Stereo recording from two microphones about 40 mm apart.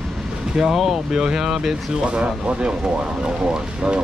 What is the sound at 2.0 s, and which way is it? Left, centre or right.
Speech, right.